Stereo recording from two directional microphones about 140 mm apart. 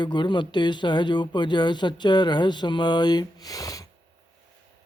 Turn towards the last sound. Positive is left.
turn(degrees=25)  # may be behind; listen again after turning